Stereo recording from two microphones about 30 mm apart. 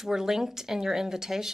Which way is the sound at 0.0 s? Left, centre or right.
Centre.